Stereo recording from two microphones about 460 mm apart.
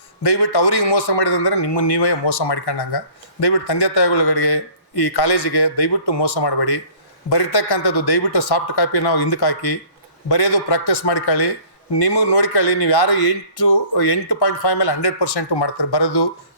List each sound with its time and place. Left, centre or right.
0.3 s speech: left
7.3 s speech: left